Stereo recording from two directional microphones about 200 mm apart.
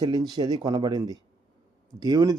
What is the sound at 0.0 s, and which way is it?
Speech, 20° right (ahead or behind).